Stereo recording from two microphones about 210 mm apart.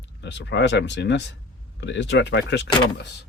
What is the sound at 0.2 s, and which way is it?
Speech, 55° left (ahead or behind).